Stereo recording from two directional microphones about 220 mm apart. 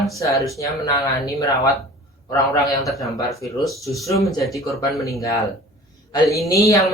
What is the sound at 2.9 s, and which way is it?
Speech, 15° left (ahead or behind).